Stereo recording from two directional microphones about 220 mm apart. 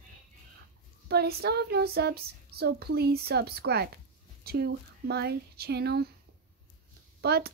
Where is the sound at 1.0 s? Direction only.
45° right (ahead or behind).